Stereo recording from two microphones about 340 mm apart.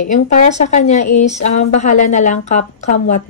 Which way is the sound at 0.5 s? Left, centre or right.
Centre.